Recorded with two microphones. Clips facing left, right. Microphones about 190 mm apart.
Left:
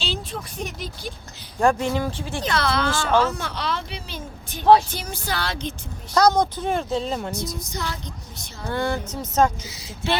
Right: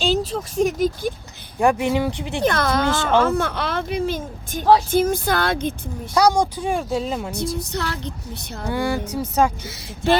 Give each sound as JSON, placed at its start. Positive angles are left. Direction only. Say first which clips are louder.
{"t": 0.0, "sound": "speech", "louder": "right 9 dB", "side_deg": -40}
{"t": 1.5, "sound": "speech", "louder": "right 2 dB", "side_deg": -15}
{"t": 2.4, "sound": "speech", "louder": "right 4 dB", "side_deg": -50}
{"t": 2.8, "sound": "speech", "louder": "right 3 dB", "side_deg": -20}
{"t": 3.2, "sound": "speech", "louder": "right 4 dB", "side_deg": -55}
{"t": 6.1, "sound": "speech", "louder": "right 1 dB", "side_deg": -10}
{"t": 7.7, "sound": "speech", "louder": "right 4 dB", "side_deg": -65}
{"t": 8.7, "sound": "speech", "louder": "right 2 dB", "side_deg": -10}
{"t": 9.6, "sound": "speech", "louder": "right 6 dB", "side_deg": -50}